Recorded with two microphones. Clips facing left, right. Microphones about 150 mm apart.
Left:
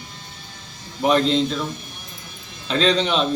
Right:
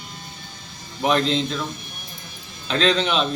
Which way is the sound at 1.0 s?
Centre (ahead or behind).